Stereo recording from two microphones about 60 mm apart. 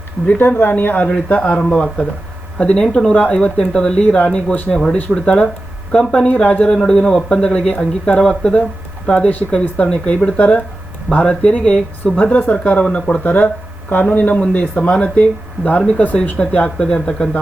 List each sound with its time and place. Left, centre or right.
0.3 s speech: left
1.3 s speech: left